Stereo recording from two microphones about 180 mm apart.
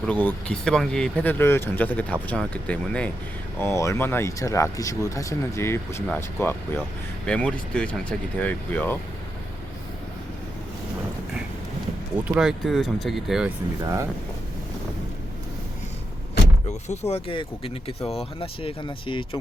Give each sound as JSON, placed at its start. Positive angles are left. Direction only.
{"t": 0.0, "sound": "speech", "side_deg": 5}
{"t": 12.3, "sound": "speech", "side_deg": -5}
{"t": 13.8, "sound": "speech", "side_deg": -15}
{"t": 16.6, "sound": "speech", "side_deg": 40}